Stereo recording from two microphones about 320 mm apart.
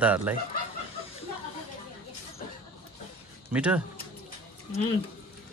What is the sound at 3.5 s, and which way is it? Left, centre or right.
Speech, centre.